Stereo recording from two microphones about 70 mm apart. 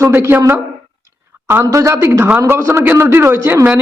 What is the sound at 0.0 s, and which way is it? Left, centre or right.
Speech, right.